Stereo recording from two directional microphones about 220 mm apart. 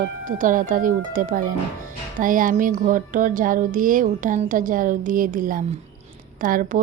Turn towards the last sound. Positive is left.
turn(degrees=-40)  # may be behind; listen again after turning